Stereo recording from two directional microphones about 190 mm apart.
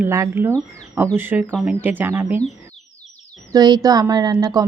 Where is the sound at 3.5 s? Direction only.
20° right (ahead or behind).